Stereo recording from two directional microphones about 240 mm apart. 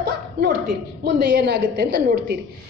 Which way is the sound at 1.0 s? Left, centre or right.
Right.